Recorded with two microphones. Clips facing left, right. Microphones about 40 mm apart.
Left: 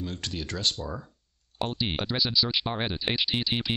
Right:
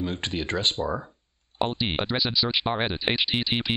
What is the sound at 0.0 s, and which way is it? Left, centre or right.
Speech, right.